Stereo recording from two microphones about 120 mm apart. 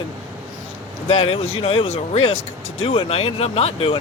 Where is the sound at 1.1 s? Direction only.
50° left (ahead or behind).